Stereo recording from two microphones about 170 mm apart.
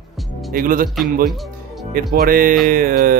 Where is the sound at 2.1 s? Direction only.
60° right (ahead or behind).